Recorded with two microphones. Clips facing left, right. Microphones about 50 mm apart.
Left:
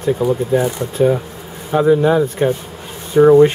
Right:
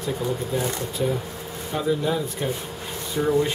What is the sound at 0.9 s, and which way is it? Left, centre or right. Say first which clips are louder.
Speech: left 14 dB; left.